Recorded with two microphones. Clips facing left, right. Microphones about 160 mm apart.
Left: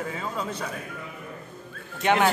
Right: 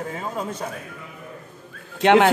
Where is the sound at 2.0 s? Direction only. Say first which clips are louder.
Right 7 dB; 90° right.